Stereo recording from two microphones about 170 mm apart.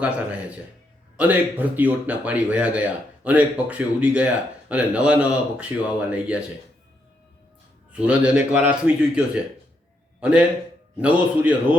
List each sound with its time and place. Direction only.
1.1 s speech: 10° right (ahead or behind)
8.0 s a man's voice: 5° right (ahead or behind)